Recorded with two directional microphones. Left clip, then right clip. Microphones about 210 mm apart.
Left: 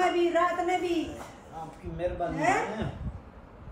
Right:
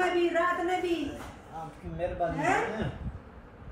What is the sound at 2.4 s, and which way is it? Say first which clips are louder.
Speech: left 2 dB; centre (ahead or behind).